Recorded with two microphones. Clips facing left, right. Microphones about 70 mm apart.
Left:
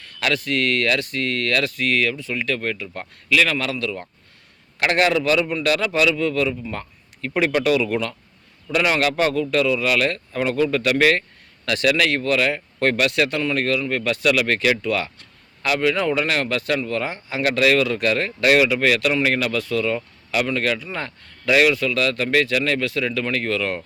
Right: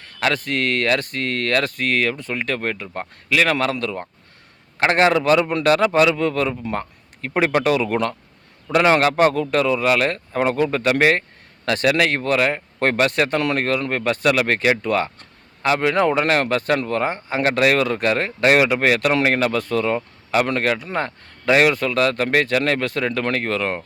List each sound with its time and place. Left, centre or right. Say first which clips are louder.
0.0 s speech: right 2 dB; right
6.7 s a sound: right 5 dB; right
7.3 s speech: right 1 dB; right
8.6 s speech: right 4 dB; right